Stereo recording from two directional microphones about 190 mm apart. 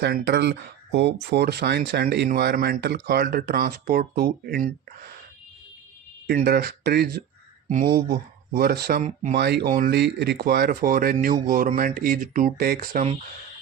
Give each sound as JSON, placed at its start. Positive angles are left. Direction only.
{"t": 0.0, "sound": "speech", "side_deg": -60}
{"t": 6.2, "sound": "speech", "side_deg": -50}
{"t": 9.6, "sound": "speech", "side_deg": -50}